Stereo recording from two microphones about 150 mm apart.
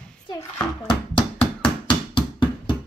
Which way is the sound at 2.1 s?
30° left (ahead or behind).